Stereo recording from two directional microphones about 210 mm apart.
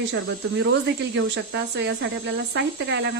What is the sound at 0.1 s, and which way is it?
Speech, 55° right (ahead or behind).